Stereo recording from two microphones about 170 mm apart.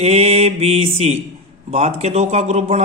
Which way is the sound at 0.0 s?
40° right (ahead or behind).